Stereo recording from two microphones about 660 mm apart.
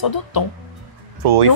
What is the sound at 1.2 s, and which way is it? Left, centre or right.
Speech, right.